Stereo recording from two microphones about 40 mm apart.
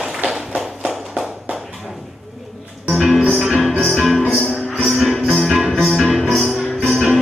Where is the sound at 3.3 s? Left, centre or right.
Centre.